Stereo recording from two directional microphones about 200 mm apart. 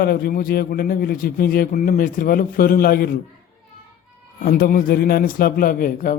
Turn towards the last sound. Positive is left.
turn(degrees=45)  # may be behind; listen again after turning